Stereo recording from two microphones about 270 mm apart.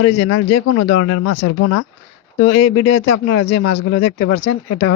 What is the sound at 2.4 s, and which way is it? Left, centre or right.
Speech, left.